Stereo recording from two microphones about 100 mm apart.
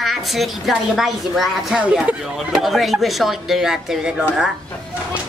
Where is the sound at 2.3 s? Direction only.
Centre (ahead or behind).